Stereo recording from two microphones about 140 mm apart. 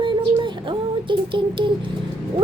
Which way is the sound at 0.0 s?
35° right (ahead or behind).